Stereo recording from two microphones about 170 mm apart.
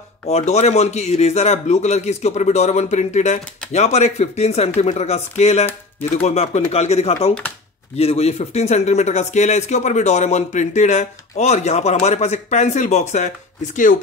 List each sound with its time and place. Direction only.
0.3 s speech: 40° left (ahead or behind)